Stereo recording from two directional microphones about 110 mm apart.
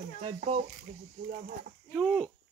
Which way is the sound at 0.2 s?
90° right.